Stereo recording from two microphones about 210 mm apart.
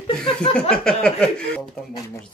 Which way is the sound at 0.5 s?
5° left (ahead or behind).